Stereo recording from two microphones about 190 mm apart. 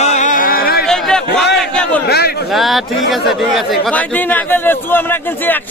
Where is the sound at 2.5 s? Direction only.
Centre (ahead or behind).